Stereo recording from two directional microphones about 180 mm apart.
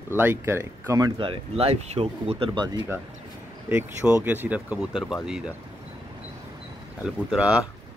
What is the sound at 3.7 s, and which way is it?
Speech, 10° right (ahead or behind).